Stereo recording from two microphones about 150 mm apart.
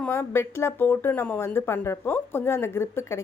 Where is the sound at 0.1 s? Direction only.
15° left (ahead or behind).